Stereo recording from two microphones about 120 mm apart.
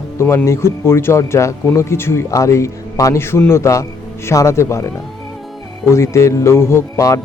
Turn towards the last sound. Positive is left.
turn(degrees=25)  # may be behind; listen again after turning